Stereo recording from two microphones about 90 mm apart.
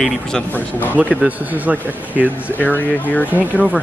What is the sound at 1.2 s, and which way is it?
Speech, 15° right (ahead or behind).